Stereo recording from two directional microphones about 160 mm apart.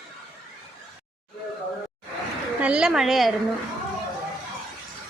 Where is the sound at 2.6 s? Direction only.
5° right (ahead or behind).